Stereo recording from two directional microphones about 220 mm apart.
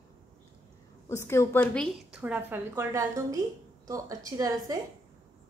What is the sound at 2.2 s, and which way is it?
A woman's voice, 10° right (ahead or behind).